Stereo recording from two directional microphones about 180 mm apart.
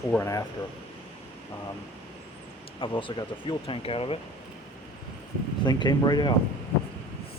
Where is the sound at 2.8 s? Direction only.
25° left (ahead or behind).